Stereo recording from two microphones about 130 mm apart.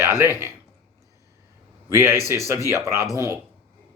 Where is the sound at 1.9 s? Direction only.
20° right (ahead or behind).